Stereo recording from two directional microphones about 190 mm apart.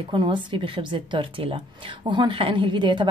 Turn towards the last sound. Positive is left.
turn(degrees=-25)  # may be behind; listen again after turning